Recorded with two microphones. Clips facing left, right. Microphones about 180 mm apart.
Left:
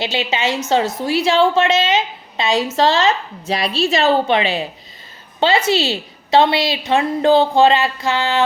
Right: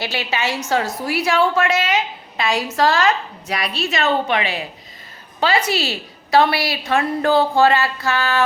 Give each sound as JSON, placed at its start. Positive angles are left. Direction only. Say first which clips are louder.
{"t": 0.0, "sound": "a woman's voice", "louder": "left 3 dB", "side_deg": 20}